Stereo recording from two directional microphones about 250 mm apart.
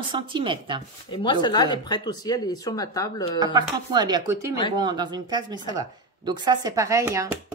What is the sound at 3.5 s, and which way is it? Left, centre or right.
A woman's voice, centre.